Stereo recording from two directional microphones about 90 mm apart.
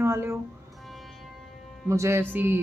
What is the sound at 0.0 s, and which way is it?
Music, 30° right (ahead or behind).